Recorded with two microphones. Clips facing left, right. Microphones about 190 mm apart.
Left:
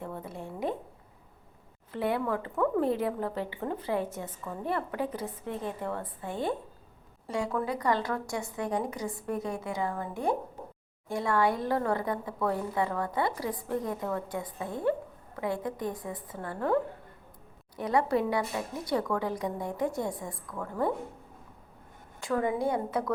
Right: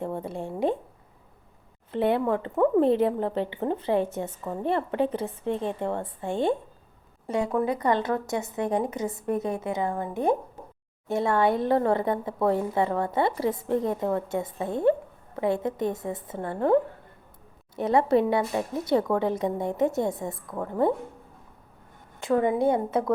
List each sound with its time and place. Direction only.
0.0 s a sound: 30° right (ahead or behind)
1.9 s speech: 25° right (ahead or behind)
17.7 s speech: 25° right (ahead or behind)
22.2 s speech: 25° right (ahead or behind)